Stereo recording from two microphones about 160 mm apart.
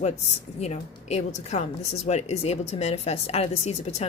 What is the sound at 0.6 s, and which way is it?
Speech, 45° left (ahead or behind).